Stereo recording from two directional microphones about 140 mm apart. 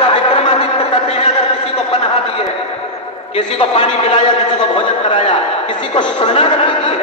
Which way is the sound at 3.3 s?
45° left (ahead or behind).